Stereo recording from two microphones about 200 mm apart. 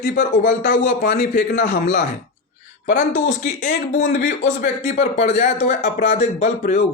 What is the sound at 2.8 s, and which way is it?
Speech, 50° left (ahead or behind).